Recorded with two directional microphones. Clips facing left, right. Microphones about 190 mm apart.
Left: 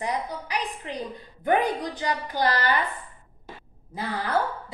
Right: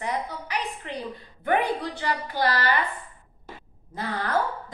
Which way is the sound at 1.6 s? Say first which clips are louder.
Left 1 dB; 40° left (ahead or behind).